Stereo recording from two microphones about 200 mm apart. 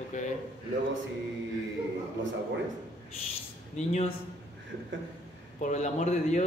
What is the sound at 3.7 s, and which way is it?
Speech, 35° left (ahead or behind).